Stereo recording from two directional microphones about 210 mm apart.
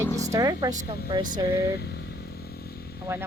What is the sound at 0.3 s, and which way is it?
Speech, 15° right (ahead or behind).